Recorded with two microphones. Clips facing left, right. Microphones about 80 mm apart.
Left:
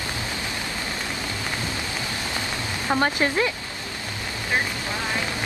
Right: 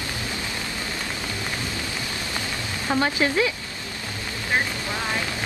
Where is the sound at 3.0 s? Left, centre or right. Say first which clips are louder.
Even; left.